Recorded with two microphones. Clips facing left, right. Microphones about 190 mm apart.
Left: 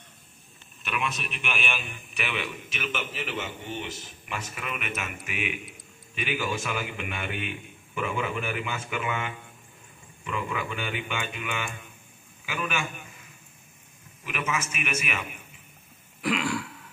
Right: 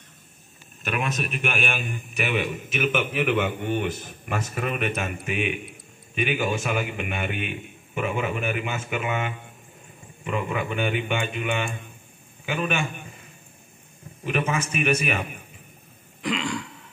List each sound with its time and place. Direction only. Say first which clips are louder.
0.8 s a man's voice: right 4 dB; 45° right (ahead or behind)
14.2 s a man's voice: right 6 dB; 35° right (ahead or behind)
16.2 s throat clearing: even; 5° left (ahead or behind)